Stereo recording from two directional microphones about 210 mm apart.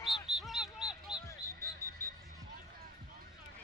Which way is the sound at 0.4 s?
Centre (ahead or behind).